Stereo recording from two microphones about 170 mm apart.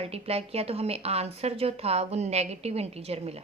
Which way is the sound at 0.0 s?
35° right (ahead or behind).